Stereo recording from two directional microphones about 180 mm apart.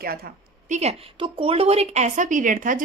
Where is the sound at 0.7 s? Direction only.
35° right (ahead or behind).